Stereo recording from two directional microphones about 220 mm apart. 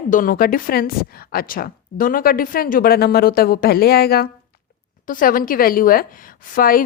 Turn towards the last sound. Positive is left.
turn(degrees=40)  # may be behind; listen again after turning